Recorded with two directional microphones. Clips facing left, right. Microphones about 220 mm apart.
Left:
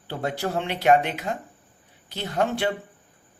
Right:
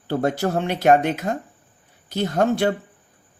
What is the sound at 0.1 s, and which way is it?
Speech, 45° right (ahead or behind).